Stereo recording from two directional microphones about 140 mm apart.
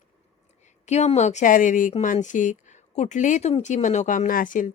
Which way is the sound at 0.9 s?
50° left (ahead or behind).